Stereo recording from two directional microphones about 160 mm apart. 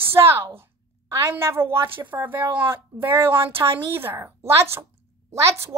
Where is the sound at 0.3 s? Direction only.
15° right (ahead or behind).